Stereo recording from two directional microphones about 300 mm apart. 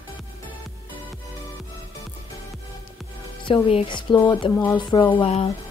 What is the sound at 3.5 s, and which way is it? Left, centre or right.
Speech, centre.